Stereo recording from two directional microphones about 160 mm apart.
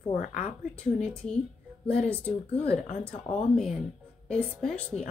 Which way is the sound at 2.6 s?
40° left (ahead or behind).